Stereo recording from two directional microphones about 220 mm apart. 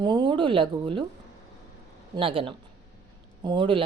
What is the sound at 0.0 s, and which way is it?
Speech, 20° right (ahead or behind).